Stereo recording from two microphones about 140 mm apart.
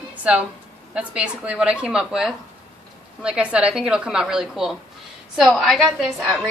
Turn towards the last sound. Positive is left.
turn(degrees=0)  # may be behind; listen again after turning